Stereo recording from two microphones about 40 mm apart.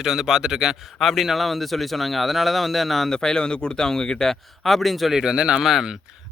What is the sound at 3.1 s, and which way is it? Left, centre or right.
Speech, centre.